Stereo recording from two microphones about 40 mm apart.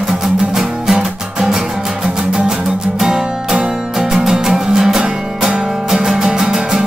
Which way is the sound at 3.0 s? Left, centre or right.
Centre.